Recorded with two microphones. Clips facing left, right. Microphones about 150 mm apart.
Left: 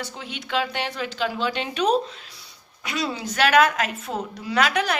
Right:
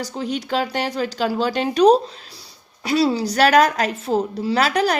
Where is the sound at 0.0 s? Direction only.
35° right (ahead or behind).